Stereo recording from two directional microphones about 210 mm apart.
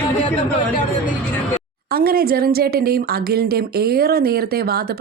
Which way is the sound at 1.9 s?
45° right (ahead or behind).